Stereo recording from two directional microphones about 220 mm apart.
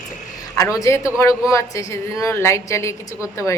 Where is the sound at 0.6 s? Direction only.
15° left (ahead or behind).